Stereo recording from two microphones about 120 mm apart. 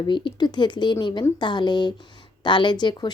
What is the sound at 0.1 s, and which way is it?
A woman's voice, 40° left (ahead or behind).